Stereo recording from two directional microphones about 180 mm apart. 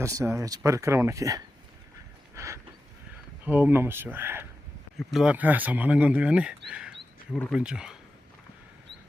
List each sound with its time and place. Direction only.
0.0 s speech: 15° right (ahead or behind)
2.3 s a sound: 15° right (ahead or behind)
3.4 s speech: 10° right (ahead or behind)